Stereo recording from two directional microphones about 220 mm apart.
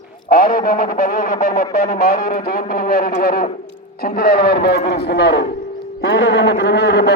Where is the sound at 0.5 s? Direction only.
40° left (ahead or behind).